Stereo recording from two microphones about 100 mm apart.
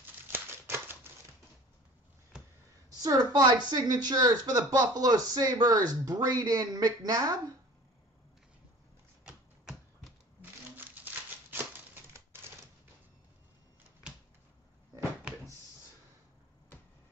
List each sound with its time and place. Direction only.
0.3 s typewriter: 20° right (ahead or behind)
3.0 s speech: 35° right (ahead or behind)
11.0 s a sound: 20° right (ahead or behind)
11.5 s typewriter: 20° right (ahead or behind)